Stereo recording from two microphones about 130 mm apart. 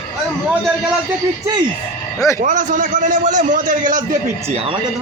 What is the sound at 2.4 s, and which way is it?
A man's voice, 90° right.